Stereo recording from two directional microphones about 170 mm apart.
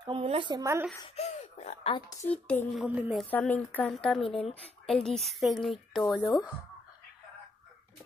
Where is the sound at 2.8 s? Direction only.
5° right (ahead or behind).